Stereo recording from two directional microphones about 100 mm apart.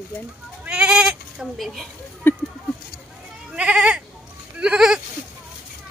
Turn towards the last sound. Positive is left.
turn(degrees=-10)  # may be behind; listen again after turning